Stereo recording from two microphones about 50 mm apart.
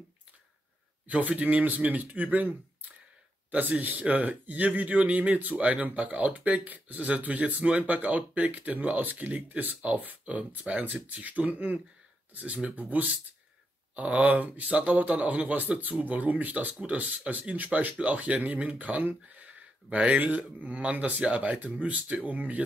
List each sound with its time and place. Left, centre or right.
1.0 s speech: right
3.5 s speech: right
17.6 s speech: right